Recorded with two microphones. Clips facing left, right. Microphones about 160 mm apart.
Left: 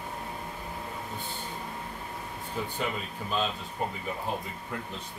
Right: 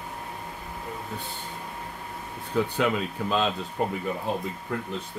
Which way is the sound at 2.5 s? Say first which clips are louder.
Right 9 dB; 80° right.